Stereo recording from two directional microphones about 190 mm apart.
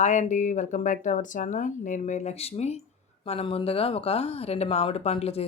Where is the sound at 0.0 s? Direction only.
40° left (ahead or behind).